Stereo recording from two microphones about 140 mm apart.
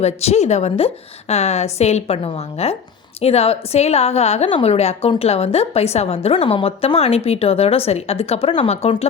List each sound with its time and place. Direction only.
0.0 s a woman's voice: 50° left (ahead or behind)